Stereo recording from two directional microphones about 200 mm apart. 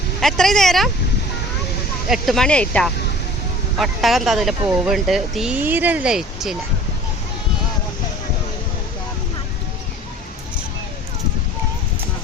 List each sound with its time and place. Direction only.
0.2 s speech: centre (ahead or behind)
2.0 s speech: centre (ahead or behind)